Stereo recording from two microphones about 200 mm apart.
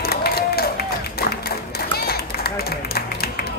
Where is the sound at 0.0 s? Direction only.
50° left (ahead or behind).